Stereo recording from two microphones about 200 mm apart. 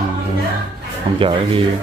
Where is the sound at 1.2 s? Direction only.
25° right (ahead or behind).